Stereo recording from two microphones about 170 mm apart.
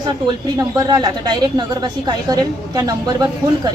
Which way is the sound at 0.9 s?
25° right (ahead or behind).